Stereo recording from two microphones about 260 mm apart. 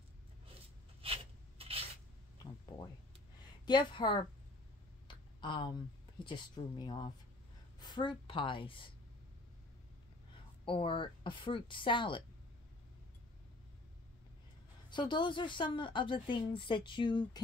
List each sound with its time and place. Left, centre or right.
1.0 s rub: right
3.6 s a woman's voice: centre
5.0 s a sound: centre
6.2 s a woman's voice: centre
10.6 s speech: centre
14.9 s a woman's voice: centre